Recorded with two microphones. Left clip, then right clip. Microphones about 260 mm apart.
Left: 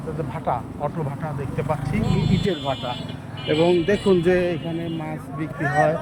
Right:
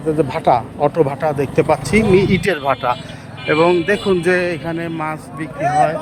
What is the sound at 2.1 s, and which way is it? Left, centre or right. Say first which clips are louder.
Speech: right 10 dB; right.